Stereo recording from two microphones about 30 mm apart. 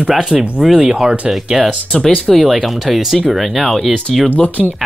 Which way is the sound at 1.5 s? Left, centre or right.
Right.